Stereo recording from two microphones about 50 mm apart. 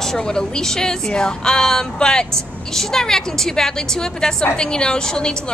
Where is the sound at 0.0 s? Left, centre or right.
Centre.